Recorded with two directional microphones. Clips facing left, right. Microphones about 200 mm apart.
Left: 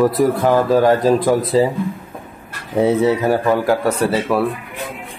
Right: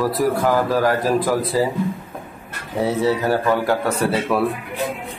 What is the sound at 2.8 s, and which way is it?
Speech, 20° left (ahead or behind).